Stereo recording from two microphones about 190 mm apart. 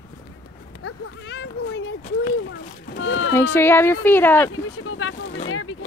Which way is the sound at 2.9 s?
85° left.